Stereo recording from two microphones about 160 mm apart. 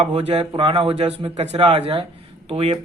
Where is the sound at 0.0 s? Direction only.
40° right (ahead or behind).